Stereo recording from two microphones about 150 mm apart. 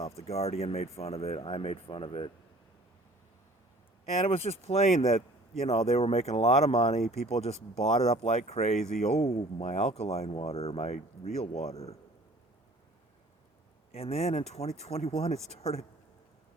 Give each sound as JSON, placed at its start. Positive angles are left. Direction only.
{"t": 0.0, "sound": "speech", "side_deg": 45}
{"t": 4.3, "sound": "speech", "side_deg": 45}
{"t": 13.9, "sound": "speech", "side_deg": 45}